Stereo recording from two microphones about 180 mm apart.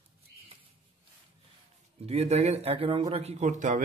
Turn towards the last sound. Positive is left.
turn(degrees=-45)  # may be behind; listen again after turning